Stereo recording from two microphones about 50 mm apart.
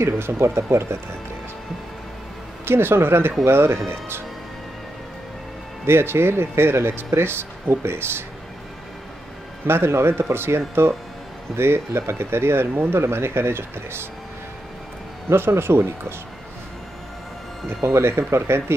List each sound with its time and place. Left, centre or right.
0.0 s speech: right
2.6 s speech: right
5.9 s speech: right
9.7 s speech: right
15.2 s speech: right
17.8 s speech: right